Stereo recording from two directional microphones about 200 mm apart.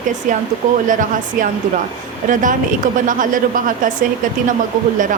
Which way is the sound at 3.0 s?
40° right (ahead or behind).